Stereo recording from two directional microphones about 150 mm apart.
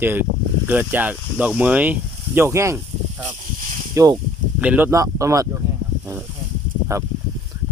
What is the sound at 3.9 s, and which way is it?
Speech, 20° right (ahead or behind).